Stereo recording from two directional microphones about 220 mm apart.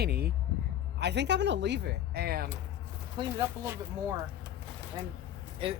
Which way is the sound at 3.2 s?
20° right (ahead or behind).